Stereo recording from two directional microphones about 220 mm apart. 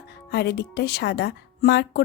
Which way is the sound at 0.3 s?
50° left (ahead or behind).